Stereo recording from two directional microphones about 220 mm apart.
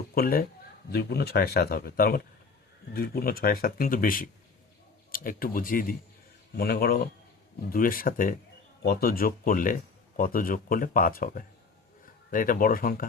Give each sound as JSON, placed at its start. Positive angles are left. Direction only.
{"t": 0.1, "sound": "a man's voice", "side_deg": 40}